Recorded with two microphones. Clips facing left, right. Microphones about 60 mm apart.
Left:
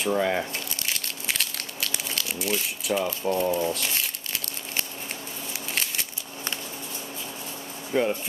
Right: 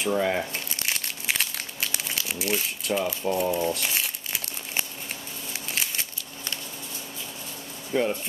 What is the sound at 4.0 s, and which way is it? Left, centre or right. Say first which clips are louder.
Crumpling: even; centre.